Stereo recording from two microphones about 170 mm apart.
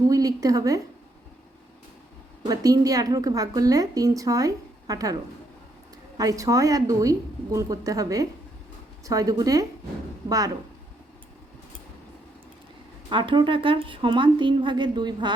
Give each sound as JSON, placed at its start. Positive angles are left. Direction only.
{"t": 0.1, "sound": "a woman's voice", "side_deg": -20}
{"t": 2.5, "sound": "a woman's voice", "side_deg": -20}
{"t": 13.1, "sound": "a woman's voice", "side_deg": -30}